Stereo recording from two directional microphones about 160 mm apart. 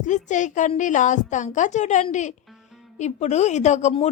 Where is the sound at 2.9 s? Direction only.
45° left (ahead or behind).